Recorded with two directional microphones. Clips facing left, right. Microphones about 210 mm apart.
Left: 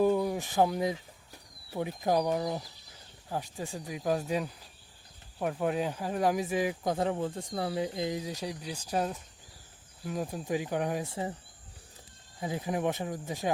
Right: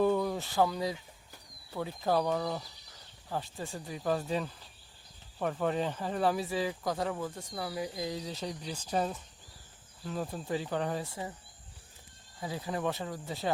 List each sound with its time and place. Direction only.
0.0 s speech: 10° left (ahead or behind)
12.4 s speech: 20° left (ahead or behind)